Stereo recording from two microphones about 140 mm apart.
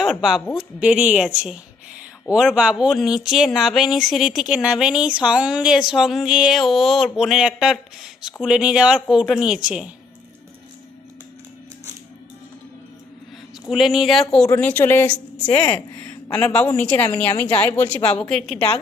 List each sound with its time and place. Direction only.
0.0 s a woman's voice: 5° right (ahead or behind)
13.7 s speech: centre (ahead or behind)
14.4 s a woman's voice: 15° left (ahead or behind)
15.4 s speech: 35° left (ahead or behind)
15.7 s a woman's voice: 10° left (ahead or behind)